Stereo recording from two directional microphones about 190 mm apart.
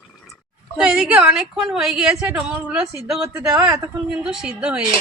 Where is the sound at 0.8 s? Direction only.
5° right (ahead or behind).